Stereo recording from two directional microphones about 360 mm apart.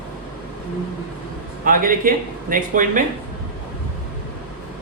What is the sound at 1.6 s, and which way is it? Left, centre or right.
Speech, right.